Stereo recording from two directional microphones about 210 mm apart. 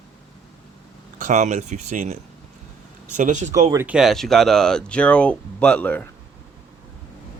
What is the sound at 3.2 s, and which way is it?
Speech, 35° right (ahead or behind).